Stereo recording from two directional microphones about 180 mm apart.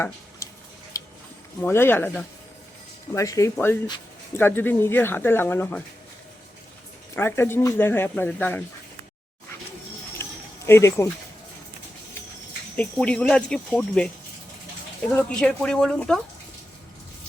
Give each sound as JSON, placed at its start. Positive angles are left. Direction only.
{"t": 0.9, "sound": "a sound", "side_deg": 20}
{"t": 1.6, "sound": "speech", "side_deg": 10}
{"t": 7.2, "sound": "speech", "side_deg": 15}
{"t": 10.7, "sound": "speech", "side_deg": 15}
{"t": 12.7, "sound": "speech", "side_deg": 5}
{"t": 15.1, "sound": "speech", "side_deg": 5}